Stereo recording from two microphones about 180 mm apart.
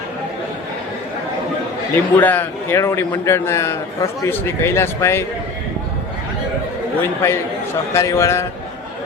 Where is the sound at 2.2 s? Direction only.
10° left (ahead or behind).